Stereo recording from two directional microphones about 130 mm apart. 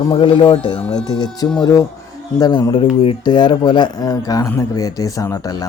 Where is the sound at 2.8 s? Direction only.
50° left (ahead or behind).